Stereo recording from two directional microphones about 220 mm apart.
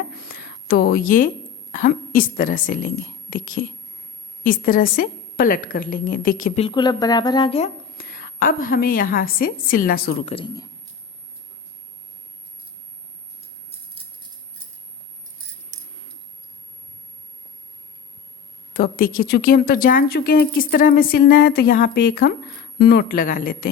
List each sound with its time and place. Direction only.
0.2 s whispering: 40° left (ahead or behind)
1.7 s speech: 40° left (ahead or behind)
6.7 s a woman's voice: 20° left (ahead or behind)
7.9 s a woman's voice: 40° left (ahead or behind)
10.2 s a woman's voice: 25° left (ahead or behind)
13.7 s rattle: 25° right (ahead or behind)
18.7 s speech: 40° left (ahead or behind)